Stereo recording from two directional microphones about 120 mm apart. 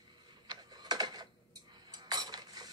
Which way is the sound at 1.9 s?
35° right (ahead or behind).